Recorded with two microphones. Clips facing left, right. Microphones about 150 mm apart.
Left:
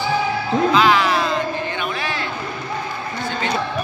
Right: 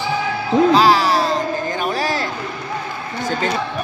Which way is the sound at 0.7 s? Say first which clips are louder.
Right 2 dB; 35° right (ahead or behind).